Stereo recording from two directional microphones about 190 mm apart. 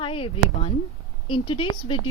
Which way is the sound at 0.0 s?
25° left (ahead or behind).